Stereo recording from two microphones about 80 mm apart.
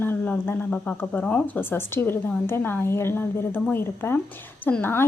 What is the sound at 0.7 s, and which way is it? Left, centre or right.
A woman's voice, centre.